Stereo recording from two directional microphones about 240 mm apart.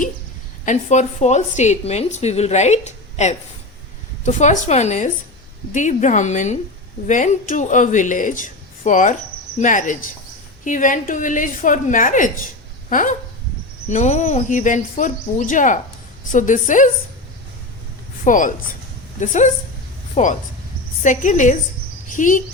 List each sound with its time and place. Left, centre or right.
0.6 s a woman's voice: left
18.3 s a woman's voice: left